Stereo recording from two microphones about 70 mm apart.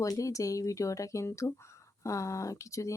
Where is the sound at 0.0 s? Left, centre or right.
Left.